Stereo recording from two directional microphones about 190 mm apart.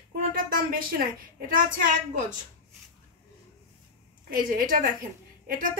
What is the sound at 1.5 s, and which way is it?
Speech, 45° right (ahead or behind).